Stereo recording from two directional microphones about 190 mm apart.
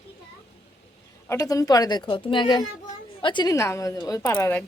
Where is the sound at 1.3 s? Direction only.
15° left (ahead or behind).